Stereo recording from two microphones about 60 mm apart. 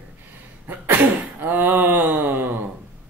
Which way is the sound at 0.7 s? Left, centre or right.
Right.